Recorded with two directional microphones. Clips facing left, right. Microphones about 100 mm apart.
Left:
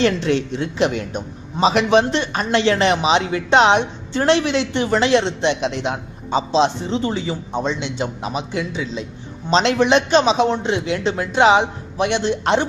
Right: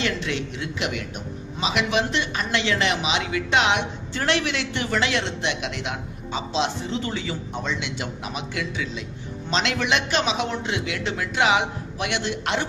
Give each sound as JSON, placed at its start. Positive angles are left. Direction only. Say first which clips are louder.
{"t": 0.0, "sound": "a man's voice", "louder": "left 9 dB", "side_deg": 35}